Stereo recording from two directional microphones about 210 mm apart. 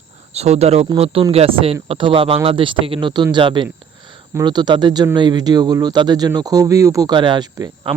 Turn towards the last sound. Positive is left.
turn(degrees=-20)  # may be behind; listen again after turning